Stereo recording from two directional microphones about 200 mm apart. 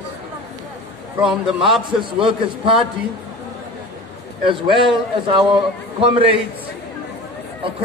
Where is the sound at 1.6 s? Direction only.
25° right (ahead or behind).